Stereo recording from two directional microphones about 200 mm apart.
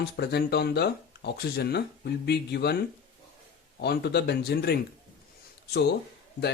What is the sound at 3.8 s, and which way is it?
Speech, 55° left (ahead or behind).